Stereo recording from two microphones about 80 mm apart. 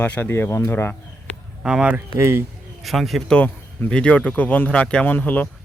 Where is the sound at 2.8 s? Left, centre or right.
Centre.